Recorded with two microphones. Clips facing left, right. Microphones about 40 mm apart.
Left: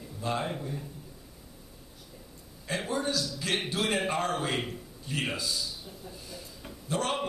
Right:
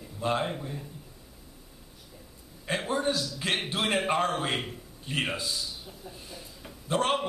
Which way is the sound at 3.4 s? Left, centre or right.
Right.